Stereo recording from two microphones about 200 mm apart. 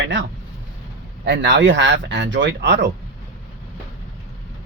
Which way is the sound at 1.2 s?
60° right (ahead or behind).